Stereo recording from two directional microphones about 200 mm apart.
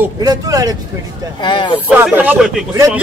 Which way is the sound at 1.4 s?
20° left (ahead or behind).